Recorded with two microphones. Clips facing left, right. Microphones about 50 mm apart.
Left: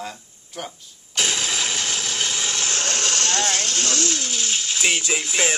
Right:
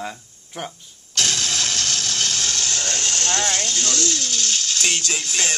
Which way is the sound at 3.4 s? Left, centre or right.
Left.